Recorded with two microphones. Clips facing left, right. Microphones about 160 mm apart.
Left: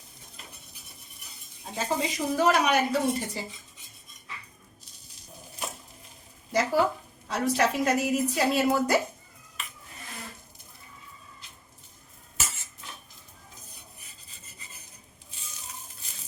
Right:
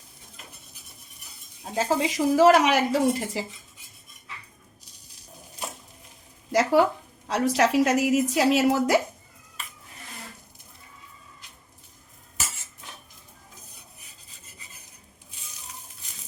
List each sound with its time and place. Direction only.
1.7 s speech: 85° right
6.5 s speech: 90° right